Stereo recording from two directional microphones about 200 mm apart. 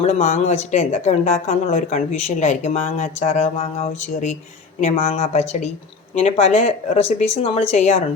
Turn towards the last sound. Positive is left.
turn(degrees=35)  # may be behind; listen again after turning